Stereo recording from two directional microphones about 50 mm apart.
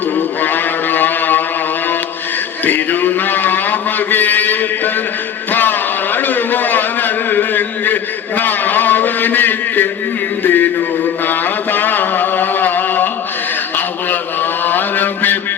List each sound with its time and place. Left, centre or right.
0.4 s music: left
2.6 s a sound: left
14.6 s mantra: left